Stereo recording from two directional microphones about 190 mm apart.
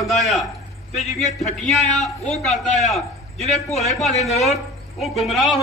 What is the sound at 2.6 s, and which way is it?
Speech, 40° left (ahead or behind).